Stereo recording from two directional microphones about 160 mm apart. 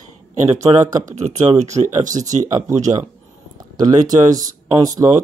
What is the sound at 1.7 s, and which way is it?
Speech, 50° right (ahead or behind).